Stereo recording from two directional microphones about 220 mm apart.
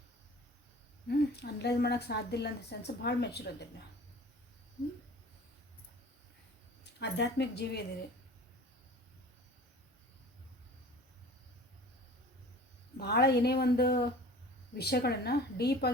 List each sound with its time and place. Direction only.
1.0 s a woman's voice: 50° left (ahead or behind)
7.0 s a woman's voice: 50° left (ahead or behind)
13.0 s a woman's voice: 50° left (ahead or behind)